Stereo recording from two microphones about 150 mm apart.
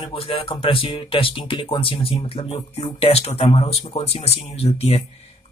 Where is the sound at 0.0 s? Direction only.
40° left (ahead or behind).